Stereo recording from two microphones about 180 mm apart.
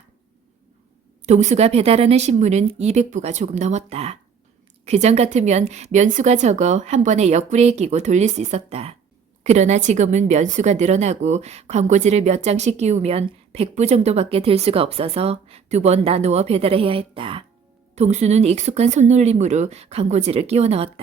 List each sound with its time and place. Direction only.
1.2 s a woman's voice: 40° right (ahead or behind)